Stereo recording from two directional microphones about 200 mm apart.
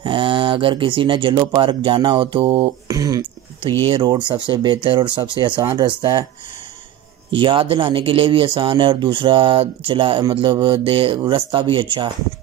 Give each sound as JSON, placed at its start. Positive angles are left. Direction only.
{"t": 0.0, "sound": "speech", "side_deg": -25}
{"t": 2.9, "sound": "a sound", "side_deg": -15}
{"t": 3.8, "sound": "speech", "side_deg": -25}
{"t": 7.3, "sound": "speech", "side_deg": -25}